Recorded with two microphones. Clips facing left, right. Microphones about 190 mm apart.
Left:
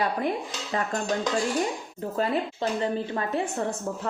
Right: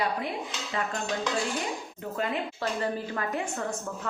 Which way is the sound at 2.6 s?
25° left (ahead or behind).